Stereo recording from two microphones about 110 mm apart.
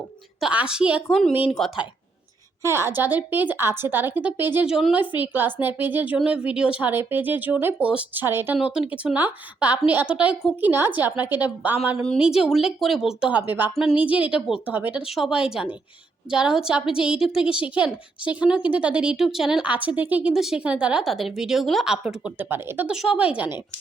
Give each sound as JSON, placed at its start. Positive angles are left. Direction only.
{"t": 0.3, "sound": "a woman's voice", "side_deg": -10}
{"t": 1.5, "sound": "a woman's voice", "side_deg": 0}
{"t": 2.6, "sound": "a woman's voice", "side_deg": -25}
{"t": 4.6, "sound": "a woman's voice", "side_deg": -5}
{"t": 4.9, "sound": "a woman's voice", "side_deg": -15}
{"t": 8.5, "sound": "a woman's voice", "side_deg": -5}
{"t": 12.2, "sound": "a woman's voice", "side_deg": -5}
{"t": 13.3, "sound": "a woman's voice", "side_deg": -15}
{"t": 22.4, "sound": "a woman's voice", "side_deg": -20}
{"t": 22.9, "sound": "a woman's voice", "side_deg": -10}